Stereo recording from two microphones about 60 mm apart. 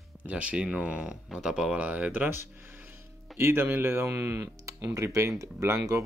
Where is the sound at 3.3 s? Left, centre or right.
Right.